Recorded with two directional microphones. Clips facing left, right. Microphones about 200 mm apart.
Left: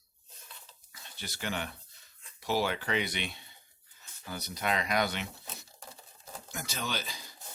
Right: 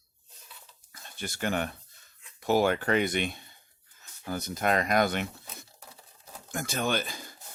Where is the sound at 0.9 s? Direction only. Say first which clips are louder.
Right 7 dB; 50° right (ahead or behind).